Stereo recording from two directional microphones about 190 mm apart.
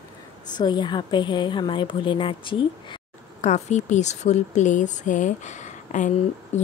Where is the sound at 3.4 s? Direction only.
35° left (ahead or behind).